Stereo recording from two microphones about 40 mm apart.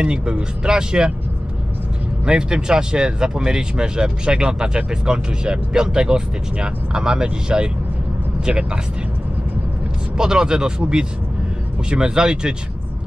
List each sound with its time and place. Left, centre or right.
0.0 s speech: right
2.2 s speech: right
10.1 s speech: centre